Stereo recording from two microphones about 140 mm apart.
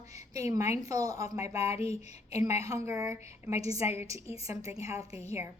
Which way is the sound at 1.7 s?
50° left (ahead or behind).